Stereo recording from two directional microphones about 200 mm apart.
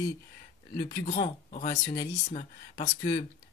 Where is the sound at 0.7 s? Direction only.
40° left (ahead or behind).